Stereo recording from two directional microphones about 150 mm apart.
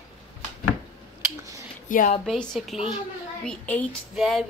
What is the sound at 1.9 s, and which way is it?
Speech, 65° left (ahead or behind).